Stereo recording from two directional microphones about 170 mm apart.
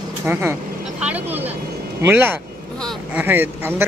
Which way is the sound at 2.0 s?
10° right (ahead or behind).